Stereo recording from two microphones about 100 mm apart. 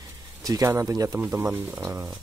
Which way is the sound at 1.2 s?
20° right (ahead or behind).